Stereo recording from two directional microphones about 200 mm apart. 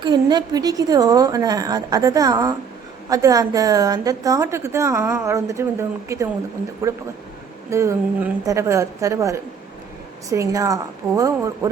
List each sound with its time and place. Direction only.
0.0 s a woman's voice: 20° right (ahead or behind)
6.8 s a woman's voice: 15° right (ahead or behind)